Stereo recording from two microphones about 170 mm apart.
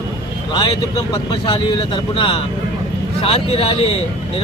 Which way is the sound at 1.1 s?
25° left (ahead or behind).